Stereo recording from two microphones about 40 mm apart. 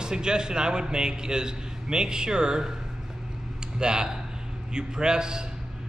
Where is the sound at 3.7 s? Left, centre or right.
Centre.